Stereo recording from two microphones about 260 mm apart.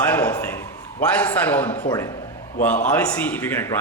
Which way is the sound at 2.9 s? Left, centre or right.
Centre.